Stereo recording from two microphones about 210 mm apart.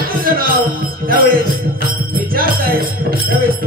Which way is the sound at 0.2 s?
45° right (ahead or behind).